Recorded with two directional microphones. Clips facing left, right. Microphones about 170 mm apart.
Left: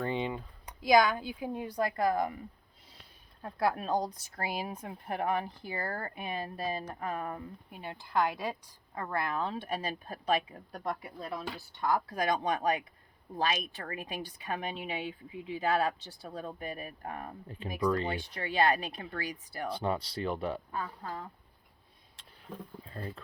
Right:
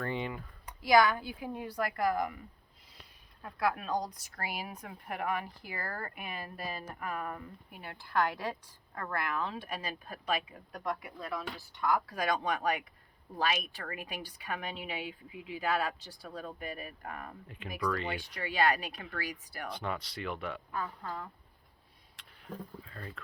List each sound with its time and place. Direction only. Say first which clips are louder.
0.0 s speech: left 3 dB; 20° left (ahead or behind)
3.4 s speech: left 2 dB; 30° left (ahead or behind)
22.8 s speech: left 4 dB; 35° left (ahead or behind)